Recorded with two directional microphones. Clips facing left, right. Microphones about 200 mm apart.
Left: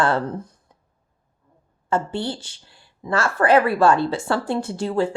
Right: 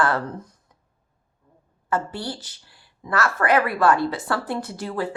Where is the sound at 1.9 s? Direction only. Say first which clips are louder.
Left 3 dB; 25° left (ahead or behind).